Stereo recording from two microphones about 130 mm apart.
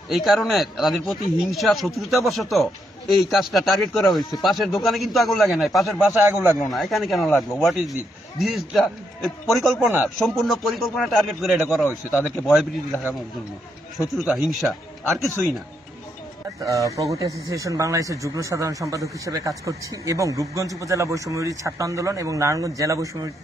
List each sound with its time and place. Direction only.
0.1 s a man's voice: centre (ahead or behind)
6.1 s a man's voice: 15° right (ahead or behind)
6.7 s a man's voice: centre (ahead or behind)
14.1 s a man's voice: 5° right (ahead or behind)
16.6 s speech: 25° right (ahead or behind)